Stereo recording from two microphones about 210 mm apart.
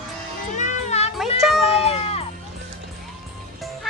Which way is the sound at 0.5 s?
35° left (ahead or behind).